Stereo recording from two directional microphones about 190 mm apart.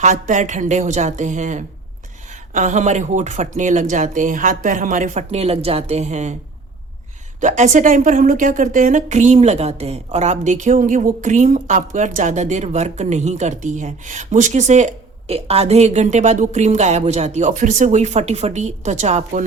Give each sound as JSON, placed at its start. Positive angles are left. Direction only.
{"t": 0.0, "sound": "a woman's voice", "side_deg": -40}
{"t": 7.4, "sound": "a woman's voice", "side_deg": -40}